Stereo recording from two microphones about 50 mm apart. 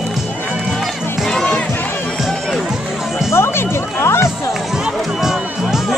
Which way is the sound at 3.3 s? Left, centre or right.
Left.